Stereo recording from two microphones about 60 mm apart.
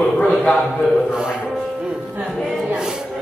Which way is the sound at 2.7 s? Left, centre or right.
Centre.